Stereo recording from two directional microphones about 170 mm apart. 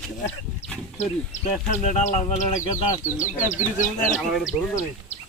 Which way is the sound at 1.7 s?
45° left (ahead or behind).